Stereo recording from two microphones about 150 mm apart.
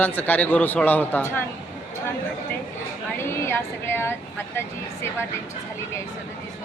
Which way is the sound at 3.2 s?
15° left (ahead or behind).